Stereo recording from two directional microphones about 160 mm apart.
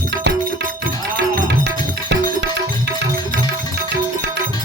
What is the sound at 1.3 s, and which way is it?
Music, 90° right.